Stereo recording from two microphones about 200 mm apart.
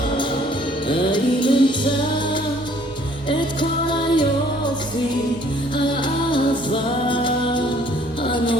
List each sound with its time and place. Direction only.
0.9 s music: 25° left (ahead or behind)
3.2 s music: 25° left (ahead or behind)
5.7 s music: 25° left (ahead or behind)